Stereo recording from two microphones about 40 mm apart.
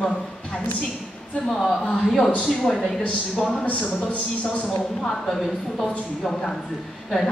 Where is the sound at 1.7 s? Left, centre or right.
Centre.